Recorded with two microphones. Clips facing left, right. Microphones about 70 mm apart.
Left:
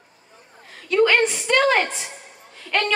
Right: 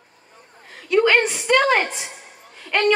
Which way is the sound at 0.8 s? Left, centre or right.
Centre.